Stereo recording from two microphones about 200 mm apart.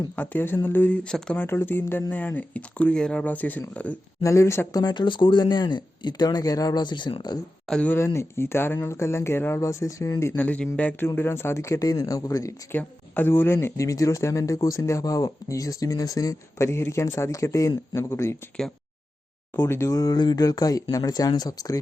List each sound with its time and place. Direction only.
0.2 s speech: 10° left (ahead or behind)
7.7 s speech: 5° left (ahead or behind)